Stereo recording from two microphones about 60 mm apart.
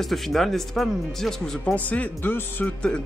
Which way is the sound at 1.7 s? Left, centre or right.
Left.